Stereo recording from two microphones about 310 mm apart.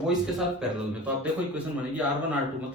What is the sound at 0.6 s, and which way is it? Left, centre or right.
A man's voice, centre.